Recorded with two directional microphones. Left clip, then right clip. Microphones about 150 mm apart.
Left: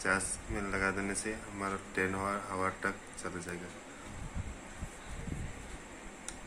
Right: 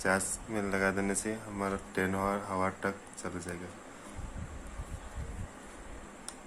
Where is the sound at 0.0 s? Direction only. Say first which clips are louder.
Right 2 dB; 90° right; by 3.5 s 70° right (ahead or behind).